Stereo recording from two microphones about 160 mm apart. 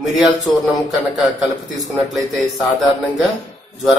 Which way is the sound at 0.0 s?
Centre (ahead or behind).